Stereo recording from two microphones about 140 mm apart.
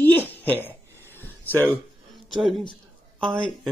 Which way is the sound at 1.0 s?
15° left (ahead or behind).